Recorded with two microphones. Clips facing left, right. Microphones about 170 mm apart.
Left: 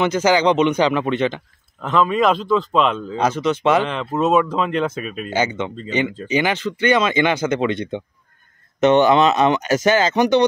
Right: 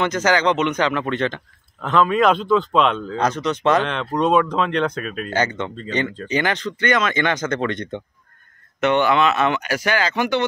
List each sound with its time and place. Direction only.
0.0 s speech: 10° left (ahead or behind)
1.8 s speech: centre (ahead or behind)
8.8 s speech: 20° left (ahead or behind)